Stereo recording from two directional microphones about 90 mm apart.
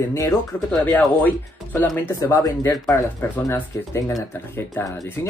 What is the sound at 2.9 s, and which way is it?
Speech, 25° left (ahead or behind).